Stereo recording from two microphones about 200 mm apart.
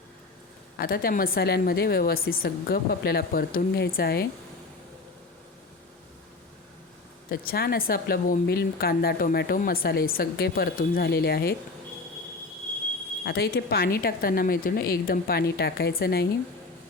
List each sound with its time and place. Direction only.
0.8 s a woman's voice: 50° left (ahead or behind)
7.3 s a woman's voice: 50° left (ahead or behind)
13.2 s a woman's voice: 50° left (ahead or behind)